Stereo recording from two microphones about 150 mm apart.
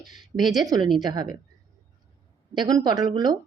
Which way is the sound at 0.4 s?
25° right (ahead or behind).